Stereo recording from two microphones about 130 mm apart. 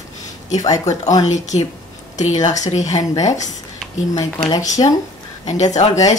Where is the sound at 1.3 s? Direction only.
65° left (ahead or behind).